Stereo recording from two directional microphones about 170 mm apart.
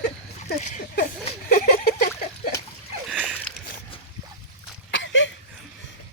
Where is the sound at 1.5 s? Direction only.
60° left (ahead or behind).